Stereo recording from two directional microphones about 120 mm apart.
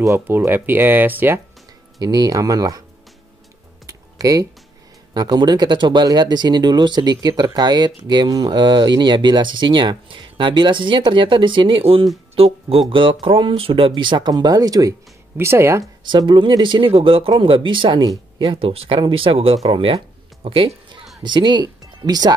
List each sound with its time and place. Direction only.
0.0 s speech: 25° right (ahead or behind)
2.0 s speech: 35° right (ahead or behind)
3.8 s typing: 30° right (ahead or behind)
5.1 s speech: 35° right (ahead or behind)
16.1 s speech: 40° right (ahead or behind)
21.2 s speech: 40° right (ahead or behind)